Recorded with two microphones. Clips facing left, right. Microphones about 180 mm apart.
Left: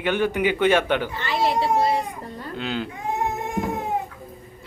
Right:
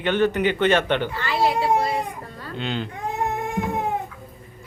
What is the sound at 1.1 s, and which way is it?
Child singing, 20° left (ahead or behind).